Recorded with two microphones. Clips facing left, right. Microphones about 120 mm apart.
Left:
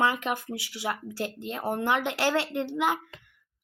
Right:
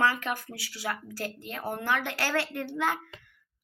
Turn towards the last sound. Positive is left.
turn(degrees=15)  # may be behind; listen again after turning